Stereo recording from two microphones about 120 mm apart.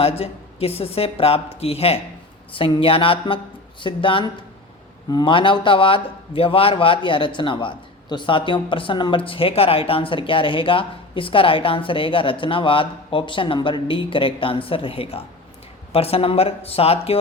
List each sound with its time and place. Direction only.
0.0 s a woman's voice: 55° left (ahead or behind)